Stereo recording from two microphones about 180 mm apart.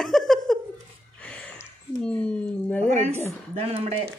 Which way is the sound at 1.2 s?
5° left (ahead or behind).